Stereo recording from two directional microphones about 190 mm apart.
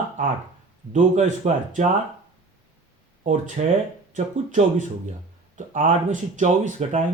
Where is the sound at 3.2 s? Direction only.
40° right (ahead or behind).